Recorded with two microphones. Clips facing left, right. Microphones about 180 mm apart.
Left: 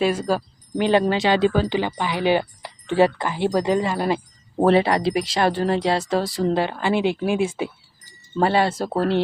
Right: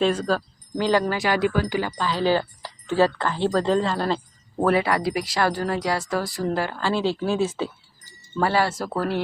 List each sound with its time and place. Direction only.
0.0 s speech: 10° left (ahead or behind)
4.6 s speech: 25° left (ahead or behind)
8.4 s speech: 25° left (ahead or behind)